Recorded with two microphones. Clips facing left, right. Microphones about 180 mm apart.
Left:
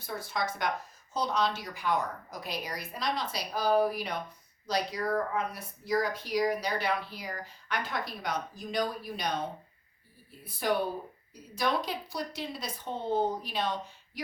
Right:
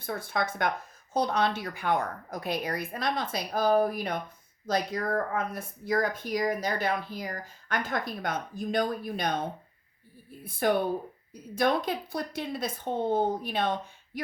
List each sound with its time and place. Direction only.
0.0 s a woman's voice: 55° right (ahead or behind)
10.4 s speech: 50° right (ahead or behind)